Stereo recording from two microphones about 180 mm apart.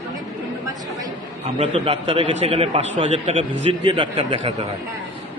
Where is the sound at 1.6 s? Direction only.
35° right (ahead or behind).